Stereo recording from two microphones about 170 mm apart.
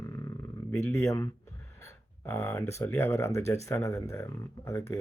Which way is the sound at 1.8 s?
15° left (ahead or behind).